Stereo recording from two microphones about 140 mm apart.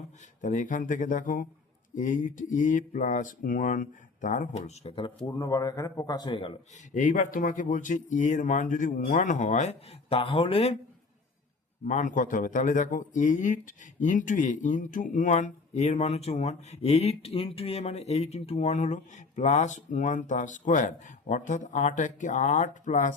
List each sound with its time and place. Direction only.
0.4 s speech: 65° left (ahead or behind); by 5.3 s 40° left (ahead or behind)
5.4 s a man's voice: 25° left (ahead or behind)
6.9 s speech: 65° left (ahead or behind); by 10.8 s 45° left (ahead or behind)
11.9 s speech: 65° left (ahead or behind)